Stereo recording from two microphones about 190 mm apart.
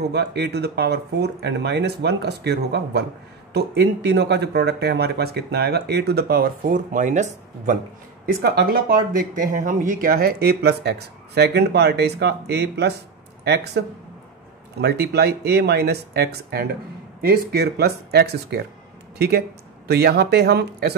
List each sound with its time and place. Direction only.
0.1 s speech: 60° right (ahead or behind); by 7.7 s 40° right (ahead or behind)
8.3 s speech: 55° right (ahead or behind)
14.8 s speech: 60° right (ahead or behind)